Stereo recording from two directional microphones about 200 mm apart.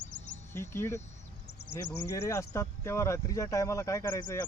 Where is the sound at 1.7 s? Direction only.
10° left (ahead or behind).